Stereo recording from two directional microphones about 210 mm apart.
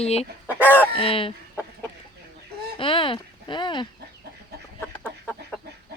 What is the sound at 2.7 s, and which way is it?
Speech, 25° left (ahead or behind).